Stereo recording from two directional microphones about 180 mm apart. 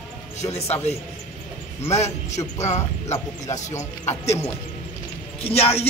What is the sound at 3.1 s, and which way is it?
Speech, 20° left (ahead or behind).